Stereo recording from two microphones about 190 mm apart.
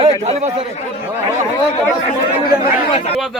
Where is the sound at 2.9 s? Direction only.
30° left (ahead or behind).